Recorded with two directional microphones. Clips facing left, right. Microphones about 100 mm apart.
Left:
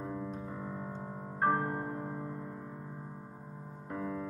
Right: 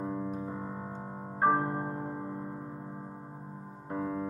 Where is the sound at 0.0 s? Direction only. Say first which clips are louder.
Right 4 dB; 25° right (ahead or behind).